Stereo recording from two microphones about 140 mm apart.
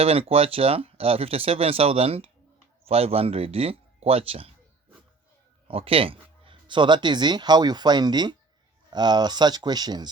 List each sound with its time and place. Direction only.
0.0 s speech: 45° right (ahead or behind)
5.6 s speech: 40° right (ahead or behind)